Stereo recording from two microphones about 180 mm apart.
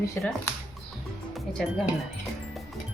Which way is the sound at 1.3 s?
Centre (ahead or behind).